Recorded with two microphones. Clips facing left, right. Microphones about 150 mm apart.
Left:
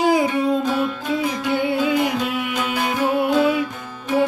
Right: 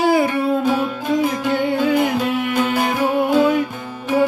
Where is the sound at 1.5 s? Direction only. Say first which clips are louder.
Left 1 dB; 10° left (ahead or behind).